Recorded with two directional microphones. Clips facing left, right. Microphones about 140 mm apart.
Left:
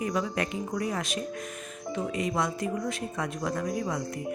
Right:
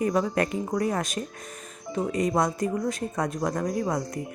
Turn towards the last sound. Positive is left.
turn(degrees=-45)  # may be behind; listen again after turning